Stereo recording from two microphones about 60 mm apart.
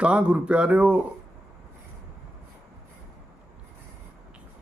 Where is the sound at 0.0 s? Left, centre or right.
Centre.